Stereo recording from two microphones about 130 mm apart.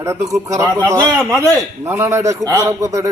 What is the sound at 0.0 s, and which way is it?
Speech, 25° right (ahead or behind).